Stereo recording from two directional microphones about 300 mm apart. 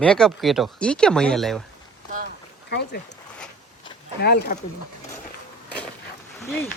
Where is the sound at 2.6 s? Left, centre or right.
Left.